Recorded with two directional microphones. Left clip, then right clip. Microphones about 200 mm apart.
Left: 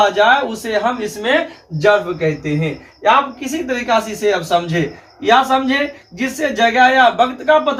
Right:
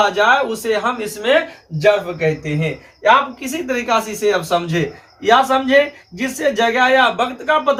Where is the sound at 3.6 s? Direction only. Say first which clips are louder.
Left 1 dB; 20° left (ahead or behind).